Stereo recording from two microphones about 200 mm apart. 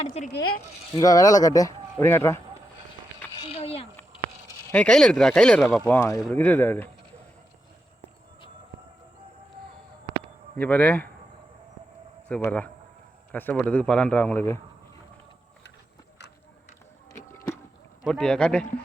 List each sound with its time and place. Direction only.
0.0 s speech: 35° left (ahead or behind)
0.3 s a woman's voice: 90° left
0.9 s a man's voice: 15° left (ahead or behind)
3.4 s a sound: 30° left (ahead or behind)
4.6 s a man's voice: 5° left (ahead or behind)
10.6 s a man's voice: 5° left (ahead or behind)
12.3 s a man's voice: 10° left (ahead or behind)
17.1 s a sound: 15° left (ahead or behind)
18.0 s speech: 5° left (ahead or behind)